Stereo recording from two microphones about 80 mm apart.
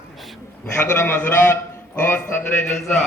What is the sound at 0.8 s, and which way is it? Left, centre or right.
A man's voice, left.